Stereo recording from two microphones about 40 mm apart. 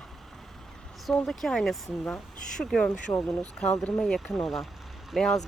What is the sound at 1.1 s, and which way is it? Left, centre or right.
Speech, centre.